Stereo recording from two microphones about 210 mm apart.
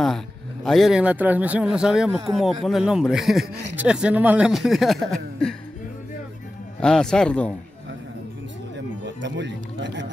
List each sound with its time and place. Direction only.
0.7 s speech: centre (ahead or behind)
6.8 s speech: 5° left (ahead or behind)
8.7 s music: 60° right (ahead or behind)